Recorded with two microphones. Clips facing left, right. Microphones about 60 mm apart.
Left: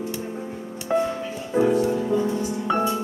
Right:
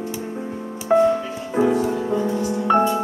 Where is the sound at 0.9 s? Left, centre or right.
Right.